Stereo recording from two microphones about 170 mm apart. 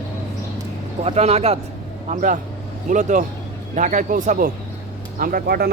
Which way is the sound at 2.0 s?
50° right (ahead or behind).